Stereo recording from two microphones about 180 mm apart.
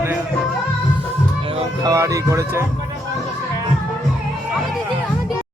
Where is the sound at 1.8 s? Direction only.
20° right (ahead or behind).